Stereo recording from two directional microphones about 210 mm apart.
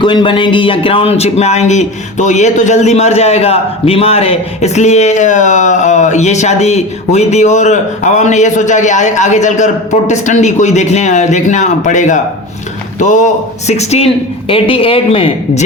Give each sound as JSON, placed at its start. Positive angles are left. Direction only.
{"t": 0.0, "sound": "a man's voice", "side_deg": 20}